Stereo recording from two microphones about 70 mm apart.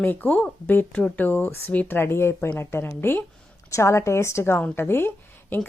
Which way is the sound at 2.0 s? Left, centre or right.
Left.